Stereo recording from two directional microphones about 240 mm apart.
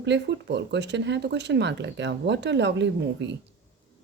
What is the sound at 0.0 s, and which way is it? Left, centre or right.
A woman's voice, right.